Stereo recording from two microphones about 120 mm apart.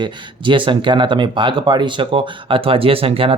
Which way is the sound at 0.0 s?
45° right (ahead or behind).